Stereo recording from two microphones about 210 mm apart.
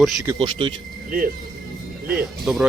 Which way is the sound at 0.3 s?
25° right (ahead or behind).